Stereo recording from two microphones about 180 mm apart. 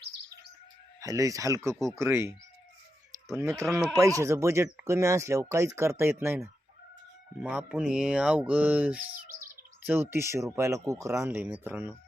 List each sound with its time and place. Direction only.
0.9 s speech: 20° right (ahead or behind)
3.4 s speech: 15° right (ahead or behind)
3.7 s speech: 5° right (ahead or behind)
3.9 s speech: 20° right (ahead or behind)